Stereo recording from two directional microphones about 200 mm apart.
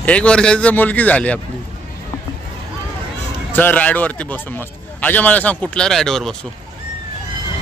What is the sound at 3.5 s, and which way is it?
A man's voice, 10° left (ahead or behind).